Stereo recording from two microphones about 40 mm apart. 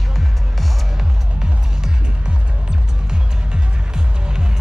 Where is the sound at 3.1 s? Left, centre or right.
Right.